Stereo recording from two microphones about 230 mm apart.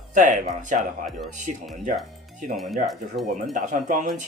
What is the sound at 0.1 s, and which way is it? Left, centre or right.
Speech, right.